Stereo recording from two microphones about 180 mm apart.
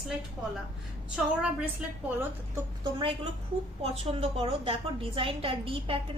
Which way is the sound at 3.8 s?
30° right (ahead or behind).